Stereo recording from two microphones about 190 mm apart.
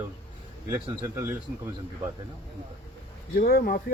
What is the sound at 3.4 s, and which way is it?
Speech, 50° left (ahead or behind).